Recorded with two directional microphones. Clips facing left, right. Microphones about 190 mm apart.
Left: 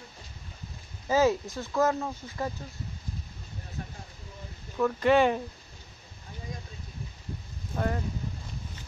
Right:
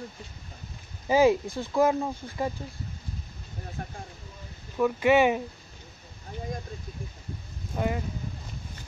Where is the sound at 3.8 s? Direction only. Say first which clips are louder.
Right 1 dB; 50° right (ahead or behind).